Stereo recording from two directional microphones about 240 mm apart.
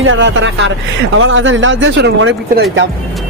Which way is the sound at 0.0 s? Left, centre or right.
Right.